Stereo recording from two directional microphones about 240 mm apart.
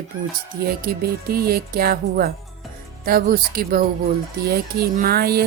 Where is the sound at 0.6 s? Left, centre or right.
Right.